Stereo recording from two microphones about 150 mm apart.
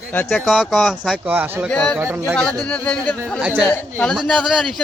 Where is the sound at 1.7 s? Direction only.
5° left (ahead or behind).